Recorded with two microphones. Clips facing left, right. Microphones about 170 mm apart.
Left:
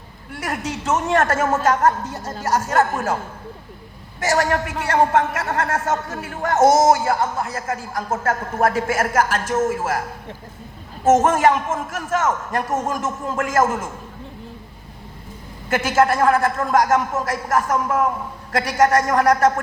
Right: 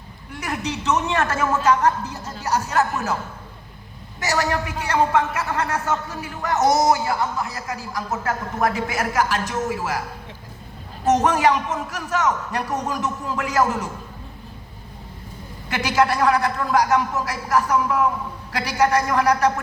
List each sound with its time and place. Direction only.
0.4 s a man's voice: 50° left (ahead or behind)
4.3 s a man's voice: 50° left (ahead or behind)
15.7 s a man's voice: 50° left (ahead or behind)